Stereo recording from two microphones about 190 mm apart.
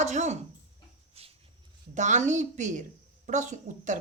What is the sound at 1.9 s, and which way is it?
A man's voice, 40° right (ahead or behind).